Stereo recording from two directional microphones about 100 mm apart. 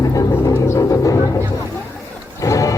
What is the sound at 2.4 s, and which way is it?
Music, 35° left (ahead or behind).